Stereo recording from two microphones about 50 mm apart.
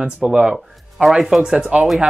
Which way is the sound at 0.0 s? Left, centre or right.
Centre.